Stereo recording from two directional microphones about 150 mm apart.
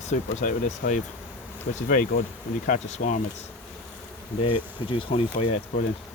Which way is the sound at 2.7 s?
55° left (ahead or behind).